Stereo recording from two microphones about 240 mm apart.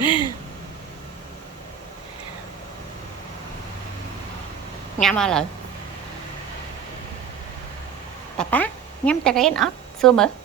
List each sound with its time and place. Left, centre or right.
0.0 s a sound: centre
4.9 s a woman's voice: centre
8.4 s a woman's voice: centre